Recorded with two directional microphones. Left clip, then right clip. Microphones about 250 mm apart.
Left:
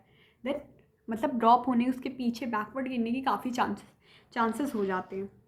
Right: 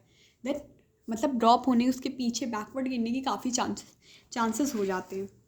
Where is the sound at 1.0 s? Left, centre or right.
Right.